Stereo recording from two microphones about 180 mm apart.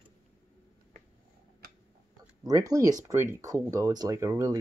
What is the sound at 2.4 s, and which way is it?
Speech, 20° right (ahead or behind).